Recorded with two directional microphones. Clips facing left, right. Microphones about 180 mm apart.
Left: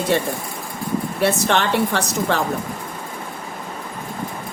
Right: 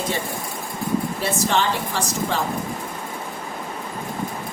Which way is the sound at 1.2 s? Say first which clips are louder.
Left 6 dB; 65° left (ahead or behind).